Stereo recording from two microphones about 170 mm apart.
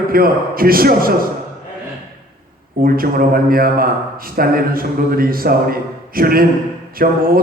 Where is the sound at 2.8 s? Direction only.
60° right (ahead or behind).